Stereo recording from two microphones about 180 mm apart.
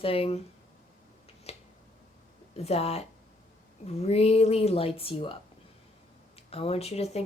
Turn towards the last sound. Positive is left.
turn(degrees=35)  # may be behind; listen again after turning